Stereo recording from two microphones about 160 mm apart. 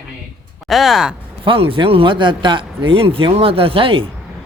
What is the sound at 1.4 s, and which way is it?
Speech, 35° right (ahead or behind).